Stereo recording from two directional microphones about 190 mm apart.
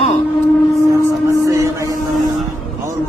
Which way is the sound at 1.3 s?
15° right (ahead or behind).